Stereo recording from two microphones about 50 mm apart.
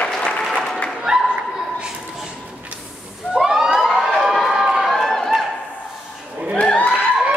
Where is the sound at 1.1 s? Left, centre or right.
Centre.